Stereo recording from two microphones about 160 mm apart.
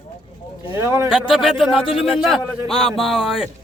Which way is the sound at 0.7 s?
15° right (ahead or behind).